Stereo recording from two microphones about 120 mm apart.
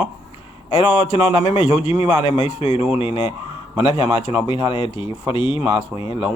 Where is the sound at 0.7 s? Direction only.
55° left (ahead or behind).